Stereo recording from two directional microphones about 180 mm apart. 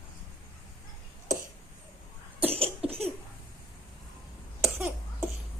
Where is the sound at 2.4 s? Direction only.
35° right (ahead or behind).